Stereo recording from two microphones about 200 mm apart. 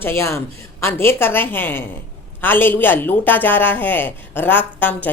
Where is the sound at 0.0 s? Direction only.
10° left (ahead or behind).